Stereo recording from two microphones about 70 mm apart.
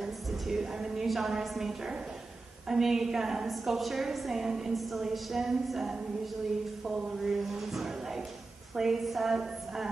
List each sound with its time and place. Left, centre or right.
0.0 s a woman's voice: centre